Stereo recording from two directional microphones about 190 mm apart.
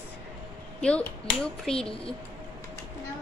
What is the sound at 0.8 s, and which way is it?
A woman's voice, 5° left (ahead or behind).